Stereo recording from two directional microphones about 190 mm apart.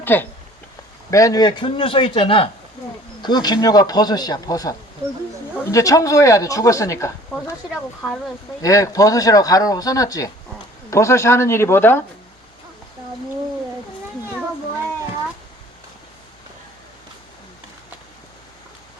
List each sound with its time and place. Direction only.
0.0 s speech: 10° left (ahead or behind)
7.7 s speech: 5° left (ahead or behind)
8.6 s speech: 15° left (ahead or behind)